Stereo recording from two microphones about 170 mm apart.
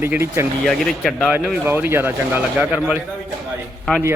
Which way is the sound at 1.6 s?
15° right (ahead or behind).